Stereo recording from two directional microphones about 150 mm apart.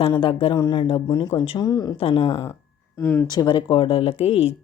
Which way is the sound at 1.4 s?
40° left (ahead or behind).